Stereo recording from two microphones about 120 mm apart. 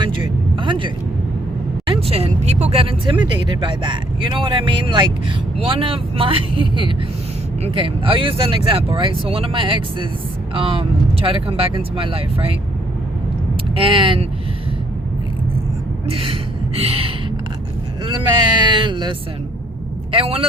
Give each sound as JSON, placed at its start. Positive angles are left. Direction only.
{"t": 0.5, "sound": "vehicle", "side_deg": -45}
{"t": 1.9, "sound": "vehicle", "side_deg": -60}
{"t": 3.2, "sound": "speech", "side_deg": -40}
{"t": 13.7, "sound": "speech", "side_deg": -45}
{"t": 16.0, "sound": "gasp", "side_deg": -50}
{"t": 18.0, "sound": "a man's voice", "side_deg": -40}